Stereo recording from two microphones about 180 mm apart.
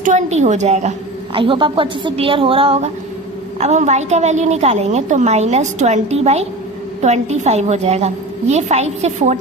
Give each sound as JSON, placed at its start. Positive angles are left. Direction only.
{"t": 0.0, "sound": "a woman's voice", "side_deg": -40}